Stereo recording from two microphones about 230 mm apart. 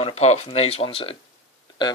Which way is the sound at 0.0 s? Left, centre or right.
Left.